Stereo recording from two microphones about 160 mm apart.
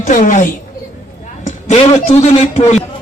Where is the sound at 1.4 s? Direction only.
45° left (ahead or behind).